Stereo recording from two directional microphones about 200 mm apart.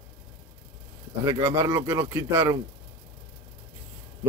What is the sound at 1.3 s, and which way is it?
Speech, 15° right (ahead or behind).